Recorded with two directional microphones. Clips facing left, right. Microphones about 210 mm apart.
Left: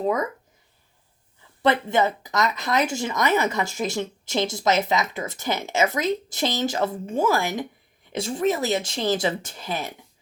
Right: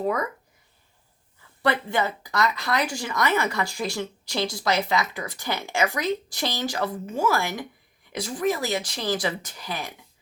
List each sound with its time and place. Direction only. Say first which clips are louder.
0.0 s speech: left 2 dB; 20° left (ahead or behind)
1.6 s speech: left 4 dB; 20° left (ahead or behind)